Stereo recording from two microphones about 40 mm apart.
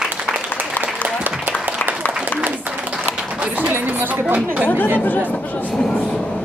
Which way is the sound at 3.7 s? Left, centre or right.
Right.